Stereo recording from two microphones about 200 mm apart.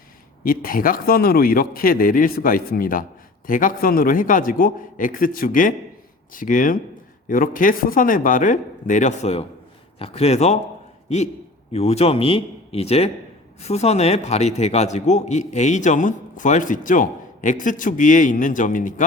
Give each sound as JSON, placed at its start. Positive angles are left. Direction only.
{"t": 0.4, "sound": "a man's voice", "side_deg": 45}
{"t": 11.7, "sound": "a man's voice", "side_deg": 30}